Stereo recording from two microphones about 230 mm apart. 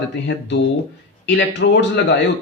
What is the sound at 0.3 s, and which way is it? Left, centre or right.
Speech, left.